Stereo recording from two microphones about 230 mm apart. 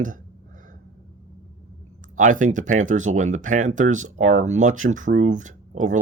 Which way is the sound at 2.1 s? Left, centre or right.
Right.